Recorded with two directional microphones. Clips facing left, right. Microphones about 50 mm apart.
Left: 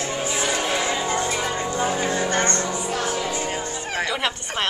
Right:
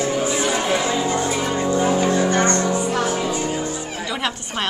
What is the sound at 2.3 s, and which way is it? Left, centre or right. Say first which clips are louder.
Music: right 4 dB; right.